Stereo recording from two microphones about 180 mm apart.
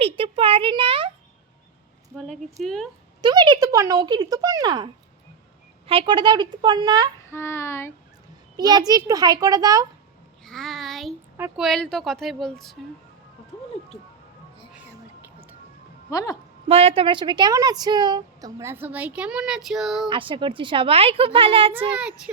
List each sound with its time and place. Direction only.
0.0 s a child's voice: 30° right (ahead or behind)
2.1 s speech: 5° left (ahead or behind)
3.2 s a woman's voice: 25° right (ahead or behind)
5.9 s a woman's voice: 30° right (ahead or behind)
7.3 s child singing: 15° left (ahead or behind)
8.5 s a child's voice: 20° right (ahead or behind)
10.4 s a child's voice: centre (ahead or behind)
16.0 s child singing: 20° left (ahead or behind)
16.6 s a woman's voice: 30° right (ahead or behind); by 20.1 s centre (ahead or behind)
20.1 s a woman's voice: 30° right (ahead or behind)
21.7 s a child's voice: 10° right (ahead or behind)